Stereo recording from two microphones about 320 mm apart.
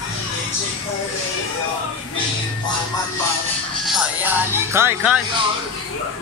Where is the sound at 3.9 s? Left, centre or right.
Centre.